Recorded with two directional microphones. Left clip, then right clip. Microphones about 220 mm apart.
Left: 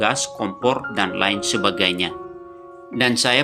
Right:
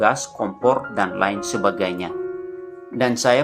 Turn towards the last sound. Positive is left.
turn(degrees=50)  # may be behind; listen again after turning